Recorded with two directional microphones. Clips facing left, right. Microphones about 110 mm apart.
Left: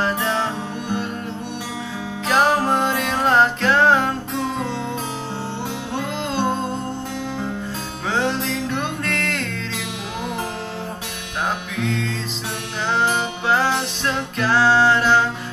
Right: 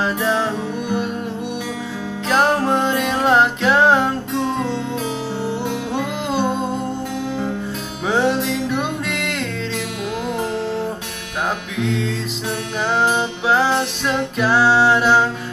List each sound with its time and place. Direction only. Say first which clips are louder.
0.0 s music: right 2 dB; 5° right (ahead or behind)
2.2 s music: right 1 dB; centre (ahead or behind)
8.1 s music: right 4 dB; 10° right (ahead or behind)
11.4 s music: right 2 dB; centre (ahead or behind)